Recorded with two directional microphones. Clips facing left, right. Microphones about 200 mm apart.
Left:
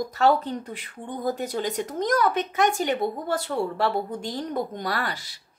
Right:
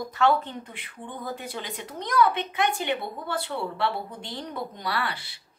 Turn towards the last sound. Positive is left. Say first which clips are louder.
# left 1 dB
turn(degrees=45)  # may be behind; listen again after turning